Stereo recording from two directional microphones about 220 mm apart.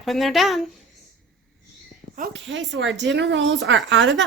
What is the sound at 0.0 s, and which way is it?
Speech, centre (ahead or behind).